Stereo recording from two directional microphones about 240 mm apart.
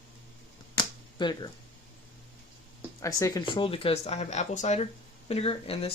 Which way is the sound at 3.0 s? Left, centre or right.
Centre.